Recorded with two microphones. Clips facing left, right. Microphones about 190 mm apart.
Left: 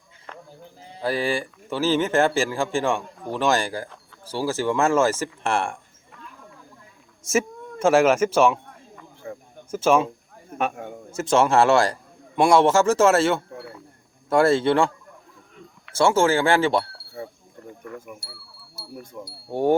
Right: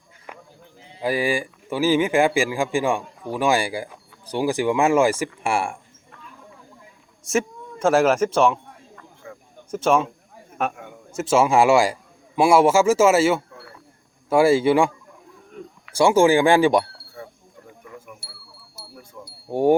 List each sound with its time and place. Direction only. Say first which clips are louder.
0.3 s a sound: even; 10° right (ahead or behind)
1.0 s speech: right 2 dB; 10° right (ahead or behind)
7.3 s a man's voice: even; 5° left (ahead or behind)
9.2 s a sound: left 5 dB; 35° left (ahead or behind)
9.7 s speech: even; 5° left (ahead or behind)
11.1 s speech: right 1 dB; 5° right (ahead or behind)
16.0 s speech: right 3 dB; 15° right (ahead or behind)
17.2 s a sound: left 4 dB; 25° left (ahead or behind)
19.5 s speech: right 3 dB; 15° right (ahead or behind)